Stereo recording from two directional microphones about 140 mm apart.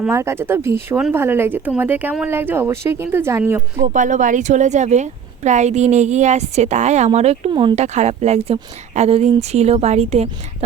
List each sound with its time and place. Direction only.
0.1 s speech: 20° right (ahead or behind)
3.8 s speech: 65° right (ahead or behind)
7.5 s speech: 35° right (ahead or behind)
7.8 s speech: 50° right (ahead or behind)